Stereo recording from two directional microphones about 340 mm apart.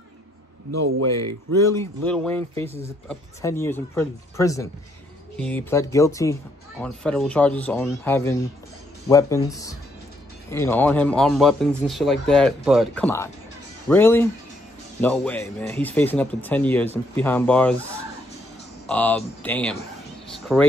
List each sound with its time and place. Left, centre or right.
0.7 s a man's voice: right
1.6 s speech: centre
10.5 s speech: centre
18.9 s speech: centre
20.2 s a sound: centre